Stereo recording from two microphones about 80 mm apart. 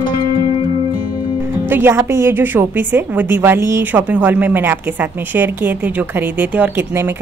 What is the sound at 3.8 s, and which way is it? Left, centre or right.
A woman's voice, right.